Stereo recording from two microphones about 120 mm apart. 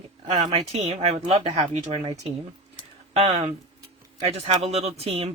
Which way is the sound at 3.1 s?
75° right (ahead or behind).